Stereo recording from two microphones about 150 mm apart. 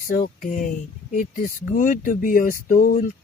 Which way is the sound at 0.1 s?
75° left (ahead or behind).